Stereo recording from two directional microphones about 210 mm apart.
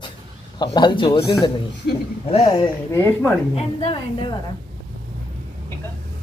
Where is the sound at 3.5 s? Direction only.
25° left (ahead or behind).